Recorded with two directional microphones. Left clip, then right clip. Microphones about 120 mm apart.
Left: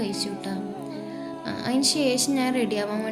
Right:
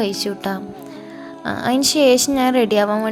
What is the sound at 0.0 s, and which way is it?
Speech, 70° right (ahead or behind).